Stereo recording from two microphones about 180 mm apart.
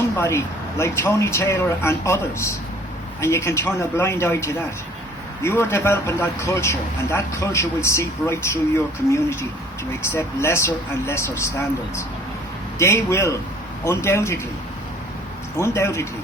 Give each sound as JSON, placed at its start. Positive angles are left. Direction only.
{"t": 0.2, "sound": "a man's voice", "side_deg": 15}
{"t": 12.8, "sound": "a man's voice", "side_deg": 15}
{"t": 15.5, "sound": "a man's voice", "side_deg": 15}